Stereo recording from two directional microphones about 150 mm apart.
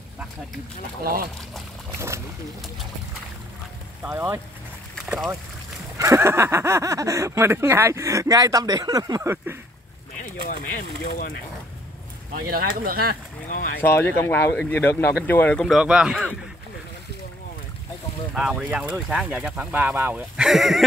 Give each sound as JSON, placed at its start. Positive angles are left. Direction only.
{"t": 2.0, "sound": "speech", "side_deg": -20}
{"t": 4.0, "sound": "speech", "side_deg": -15}
{"t": 4.9, "sound": "boat", "side_deg": 0}
{"t": 5.9, "sound": "speech", "side_deg": -20}
{"t": 12.4, "sound": "speech", "side_deg": -80}
{"t": 13.5, "sound": "speech", "side_deg": 60}
{"t": 13.7, "sound": "speech", "side_deg": 15}
{"t": 15.8, "sound": "speech", "side_deg": -5}
{"t": 18.3, "sound": "speech", "side_deg": -5}
{"t": 20.4, "sound": "speech", "side_deg": 0}